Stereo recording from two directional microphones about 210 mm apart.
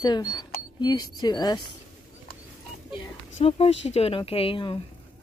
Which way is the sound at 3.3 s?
25° left (ahead or behind).